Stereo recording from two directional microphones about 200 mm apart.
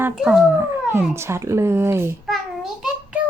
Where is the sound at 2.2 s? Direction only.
Centre (ahead or behind).